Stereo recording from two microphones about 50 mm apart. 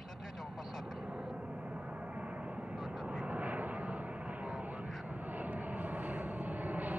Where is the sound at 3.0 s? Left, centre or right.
Right.